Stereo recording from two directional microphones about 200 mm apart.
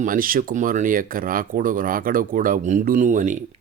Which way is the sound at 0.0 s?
45° right (ahead or behind).